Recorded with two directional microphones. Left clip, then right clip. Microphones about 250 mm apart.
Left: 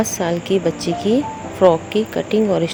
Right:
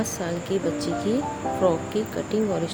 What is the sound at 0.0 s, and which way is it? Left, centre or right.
Speech, left.